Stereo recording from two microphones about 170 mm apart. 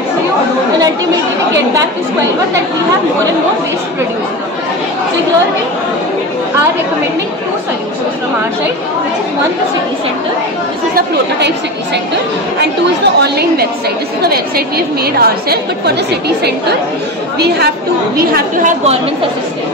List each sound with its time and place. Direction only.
11.0 s a woman's voice: 80° right
15.1 s a woman's voice: 65° right (ahead or behind)
18.1 s a woman's voice: 55° right (ahead or behind)